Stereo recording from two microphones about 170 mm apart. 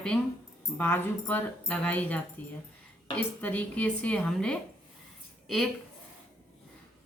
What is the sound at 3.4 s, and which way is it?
A woman's voice, 10° left (ahead or behind).